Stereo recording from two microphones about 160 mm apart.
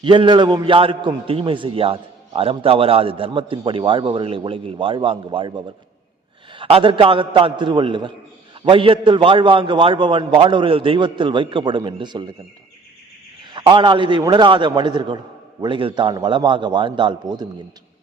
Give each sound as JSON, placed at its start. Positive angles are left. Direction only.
{"t": 0.0, "sound": "a man's voice", "side_deg": -30}
{"t": 13.5, "sound": "a man's voice", "side_deg": -30}